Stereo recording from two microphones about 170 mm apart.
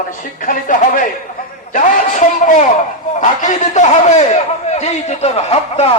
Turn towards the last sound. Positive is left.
turn(degrees=40)  # may be behind; listen again after turning